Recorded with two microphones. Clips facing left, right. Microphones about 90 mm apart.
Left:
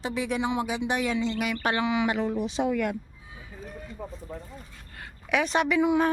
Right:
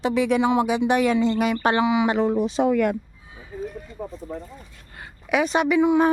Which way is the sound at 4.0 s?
15° right (ahead or behind).